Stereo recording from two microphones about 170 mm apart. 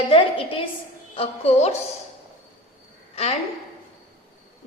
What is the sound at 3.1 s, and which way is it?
Speech, 35° left (ahead or behind).